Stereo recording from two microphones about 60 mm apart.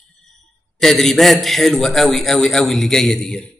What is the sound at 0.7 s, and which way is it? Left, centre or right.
A man's voice, centre.